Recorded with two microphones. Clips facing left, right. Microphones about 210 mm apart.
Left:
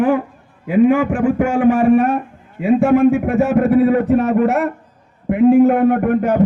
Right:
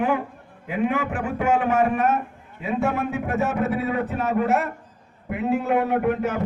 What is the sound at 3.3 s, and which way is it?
A man's voice, 55° left (ahead or behind).